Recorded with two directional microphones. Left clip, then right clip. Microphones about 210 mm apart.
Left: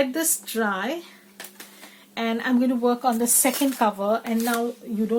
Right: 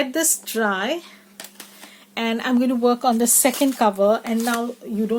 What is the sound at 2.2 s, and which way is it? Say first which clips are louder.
Speech: right 2 dB; 40° right (ahead or behind).